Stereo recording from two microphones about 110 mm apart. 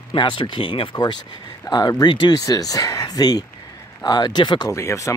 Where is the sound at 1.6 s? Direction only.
40° left (ahead or behind).